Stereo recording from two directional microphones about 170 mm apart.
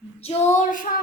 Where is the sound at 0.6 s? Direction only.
50° left (ahead or behind).